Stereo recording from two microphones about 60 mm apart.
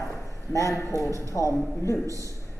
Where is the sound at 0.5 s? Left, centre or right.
Left.